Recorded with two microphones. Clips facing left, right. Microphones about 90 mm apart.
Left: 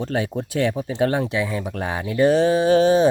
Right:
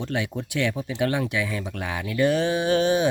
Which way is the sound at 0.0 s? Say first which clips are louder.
Left 4 dB; 35° left (ahead or behind).